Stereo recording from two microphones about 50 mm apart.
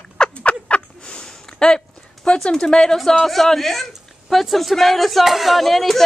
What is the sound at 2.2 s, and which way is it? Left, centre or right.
Speech, centre.